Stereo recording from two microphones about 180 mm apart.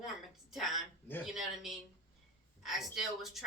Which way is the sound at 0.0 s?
Centre (ahead or behind).